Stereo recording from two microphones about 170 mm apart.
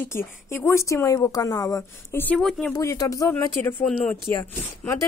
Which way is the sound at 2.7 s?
20° left (ahead or behind).